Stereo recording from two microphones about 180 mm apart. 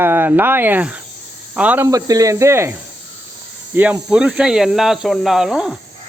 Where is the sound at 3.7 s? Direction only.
10° right (ahead or behind).